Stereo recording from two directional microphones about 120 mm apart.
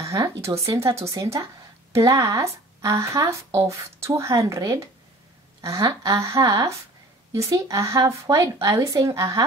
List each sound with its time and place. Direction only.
0.0 s a woman's voice: 25° right (ahead or behind)